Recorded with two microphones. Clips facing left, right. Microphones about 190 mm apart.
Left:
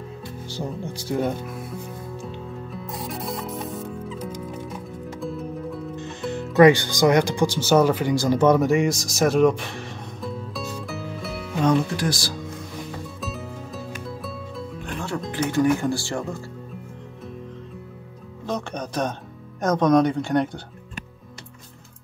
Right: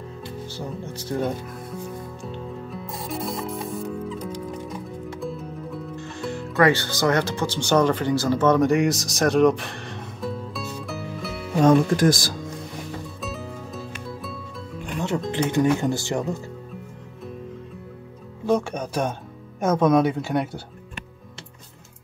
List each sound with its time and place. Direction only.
0.9 s speech: 5° left (ahead or behind)
2.3 s music: centre (ahead or behind)
5.9 s speech: 20° left (ahead or behind)
8.6 s music: centre (ahead or behind)
11.6 s speech: 50° right (ahead or behind)
15.0 s music: 20° right (ahead or behind)
15.3 s speech: 25° right (ahead or behind)
18.4 s music: 10° right (ahead or behind)
19.6 s speech: 5° right (ahead or behind)